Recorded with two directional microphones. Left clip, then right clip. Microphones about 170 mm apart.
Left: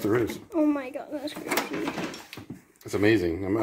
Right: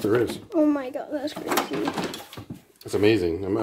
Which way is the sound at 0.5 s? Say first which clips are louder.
Right 3 dB; 10° right (ahead or behind).